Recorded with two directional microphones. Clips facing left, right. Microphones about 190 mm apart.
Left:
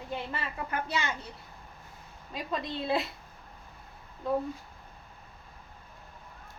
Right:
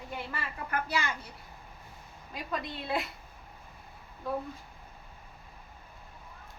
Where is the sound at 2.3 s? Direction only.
25° left (ahead or behind).